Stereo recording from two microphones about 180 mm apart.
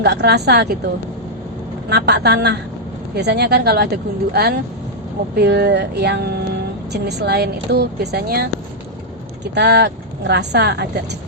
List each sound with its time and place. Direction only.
0.0 s speech: 65° right (ahead or behind)
1.9 s a woman's voice: 65° right (ahead or behind)